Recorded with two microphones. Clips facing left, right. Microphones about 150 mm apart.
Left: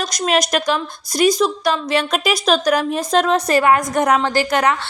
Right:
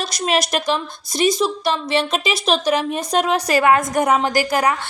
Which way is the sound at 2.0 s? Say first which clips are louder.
Left 2 dB; centre (ahead or behind).